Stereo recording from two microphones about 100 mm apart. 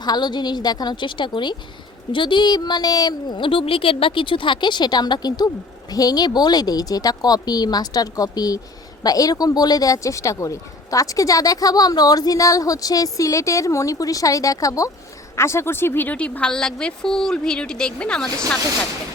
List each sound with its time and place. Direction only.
0.0 s a woman's voice: 45° left (ahead or behind); by 18.4 s 10° left (ahead or behind)